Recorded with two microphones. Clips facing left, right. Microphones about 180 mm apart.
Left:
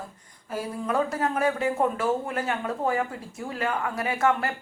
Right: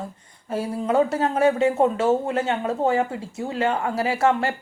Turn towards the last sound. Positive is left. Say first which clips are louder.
# right 4 dB
turn(degrees=-30)  # may be behind; listen again after turning